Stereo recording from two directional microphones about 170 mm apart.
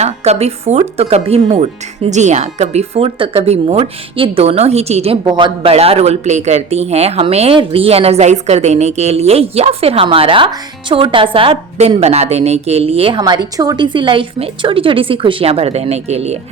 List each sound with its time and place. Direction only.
0.0 s speech: 40° right (ahead or behind)